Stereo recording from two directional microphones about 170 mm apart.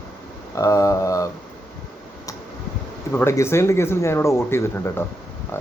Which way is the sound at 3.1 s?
15° left (ahead or behind).